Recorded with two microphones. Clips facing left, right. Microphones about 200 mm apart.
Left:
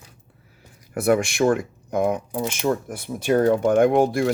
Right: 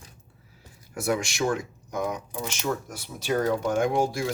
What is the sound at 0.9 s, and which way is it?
Speech, 55° left (ahead or behind).